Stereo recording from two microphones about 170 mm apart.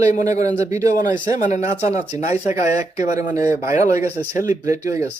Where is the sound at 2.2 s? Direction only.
40° left (ahead or behind).